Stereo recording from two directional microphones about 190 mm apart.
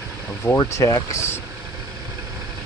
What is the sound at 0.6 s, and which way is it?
Speech, 15° left (ahead or behind).